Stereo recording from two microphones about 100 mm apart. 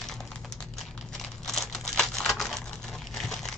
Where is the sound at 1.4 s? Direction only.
5° left (ahead or behind).